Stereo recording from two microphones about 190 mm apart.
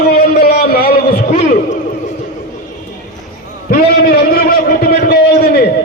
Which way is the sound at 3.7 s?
55° left (ahead or behind).